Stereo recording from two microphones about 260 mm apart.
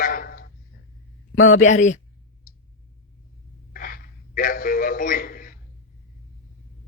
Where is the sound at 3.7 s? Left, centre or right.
Left.